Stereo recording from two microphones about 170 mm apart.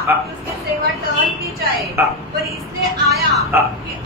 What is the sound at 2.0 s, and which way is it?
Speech, 10° right (ahead or behind).